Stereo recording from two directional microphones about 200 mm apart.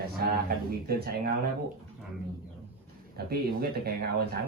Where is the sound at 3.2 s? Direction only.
50° right (ahead or behind).